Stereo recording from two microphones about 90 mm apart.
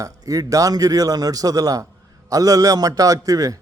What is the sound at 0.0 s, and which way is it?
A man's voice, 40° right (ahead or behind).